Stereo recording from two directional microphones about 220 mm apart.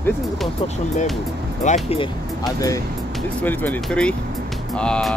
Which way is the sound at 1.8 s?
25° left (ahead or behind).